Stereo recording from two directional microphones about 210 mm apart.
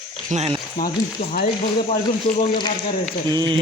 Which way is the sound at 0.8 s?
45° left (ahead or behind).